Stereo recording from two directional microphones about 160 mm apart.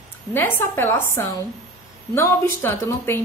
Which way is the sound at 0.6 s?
15° left (ahead or behind).